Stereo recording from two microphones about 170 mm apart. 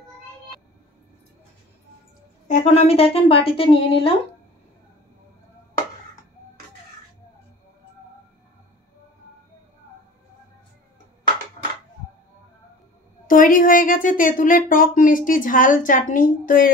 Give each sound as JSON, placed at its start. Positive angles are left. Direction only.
{"t": 2.4, "sound": "a woman's voice", "side_deg": 40}
{"t": 13.3, "sound": "a woman's voice", "side_deg": 55}